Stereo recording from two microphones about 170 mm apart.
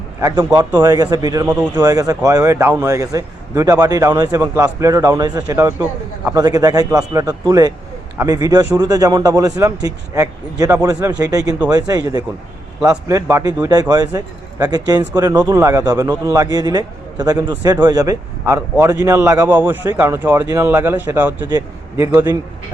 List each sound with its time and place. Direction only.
0.2 s a man's voice: 20° right (ahead or behind)